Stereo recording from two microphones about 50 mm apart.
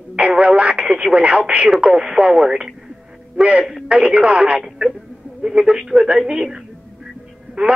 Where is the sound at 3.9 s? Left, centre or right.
Right.